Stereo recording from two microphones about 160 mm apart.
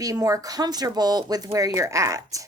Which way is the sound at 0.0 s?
20° right (ahead or behind).